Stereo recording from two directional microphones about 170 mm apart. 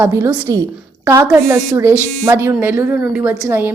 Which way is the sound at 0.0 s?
15° right (ahead or behind).